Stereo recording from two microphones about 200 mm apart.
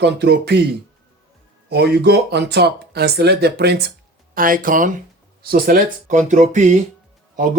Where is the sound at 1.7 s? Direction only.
55° right (ahead or behind).